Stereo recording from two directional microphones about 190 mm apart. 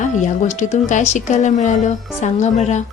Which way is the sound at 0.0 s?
40° left (ahead or behind).